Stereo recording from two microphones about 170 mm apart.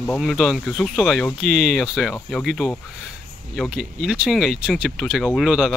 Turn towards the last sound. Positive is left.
turn(degrees=-5)  # may be behind; listen again after turning